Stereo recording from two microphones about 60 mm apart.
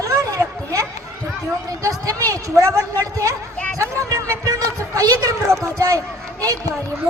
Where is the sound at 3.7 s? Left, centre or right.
Right.